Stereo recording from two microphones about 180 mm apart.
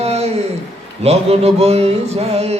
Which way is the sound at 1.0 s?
35° right (ahead or behind).